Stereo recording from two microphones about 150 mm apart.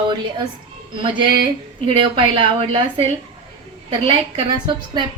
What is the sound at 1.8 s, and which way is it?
Speech, 35° right (ahead or behind).